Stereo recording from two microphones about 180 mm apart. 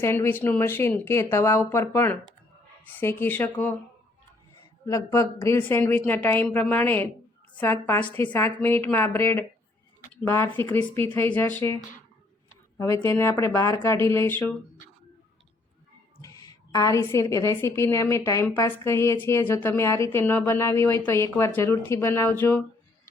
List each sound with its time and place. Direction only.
0.0 s a woman's voice: 10° left (ahead or behind)
4.9 s a woman's voice: 20° left (ahead or behind)
12.8 s a woman's voice: 15° left (ahead or behind)
16.7 s a woman's voice: 20° left (ahead or behind)